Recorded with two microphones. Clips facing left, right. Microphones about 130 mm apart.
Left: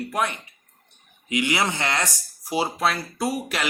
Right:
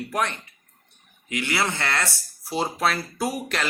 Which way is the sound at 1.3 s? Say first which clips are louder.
Left 2 dB; 15° left (ahead or behind).